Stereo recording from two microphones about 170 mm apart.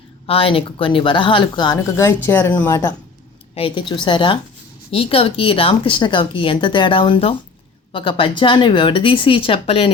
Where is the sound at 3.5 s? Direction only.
30° left (ahead or behind).